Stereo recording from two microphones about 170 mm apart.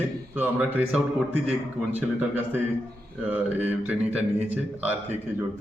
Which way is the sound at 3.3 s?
10° right (ahead or behind).